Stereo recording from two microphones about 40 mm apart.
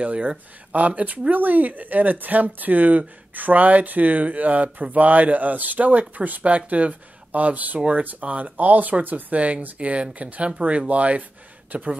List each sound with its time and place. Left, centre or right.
0.0 s speech: right